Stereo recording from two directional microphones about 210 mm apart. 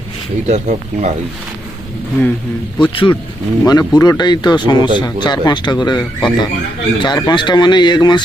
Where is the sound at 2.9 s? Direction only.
25° left (ahead or behind).